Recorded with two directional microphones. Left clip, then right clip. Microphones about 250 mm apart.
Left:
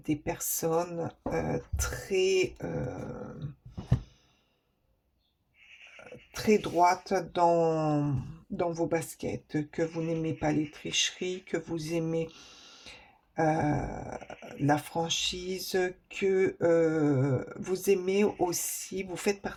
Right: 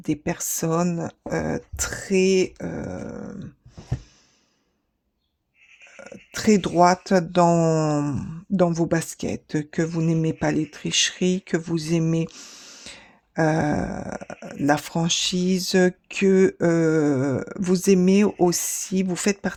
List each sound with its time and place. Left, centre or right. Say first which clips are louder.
0.0 s speech: right 6 dB; right
6.3 s speech: right 6 dB; right